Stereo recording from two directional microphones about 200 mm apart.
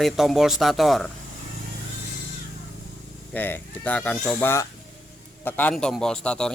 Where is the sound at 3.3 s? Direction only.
10° left (ahead or behind).